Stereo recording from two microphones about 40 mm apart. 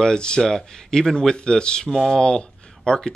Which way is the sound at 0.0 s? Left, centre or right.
Centre.